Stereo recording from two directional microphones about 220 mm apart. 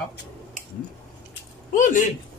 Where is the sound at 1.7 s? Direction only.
35° left (ahead or behind).